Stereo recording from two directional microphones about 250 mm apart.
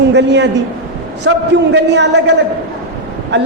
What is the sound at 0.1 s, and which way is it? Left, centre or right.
A man's voice, right.